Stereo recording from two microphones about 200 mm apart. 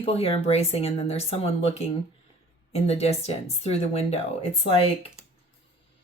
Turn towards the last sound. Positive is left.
turn(degrees=30)  # may be behind; listen again after turning